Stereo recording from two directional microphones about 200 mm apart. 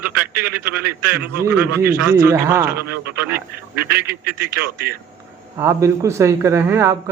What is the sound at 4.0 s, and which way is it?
Speech, 50° right (ahead or behind).